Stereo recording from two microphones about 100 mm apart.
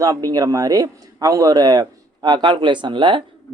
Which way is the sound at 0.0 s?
35° right (ahead or behind).